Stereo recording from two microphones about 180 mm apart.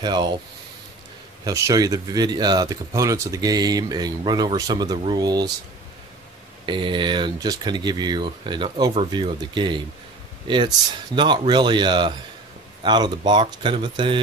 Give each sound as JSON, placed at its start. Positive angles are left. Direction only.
{"t": 0.0, "sound": "speech", "side_deg": -25}
{"t": 1.4, "sound": "speech", "side_deg": -20}
{"t": 6.6, "sound": "speech", "side_deg": -25}
{"t": 11.1, "sound": "speech", "side_deg": -25}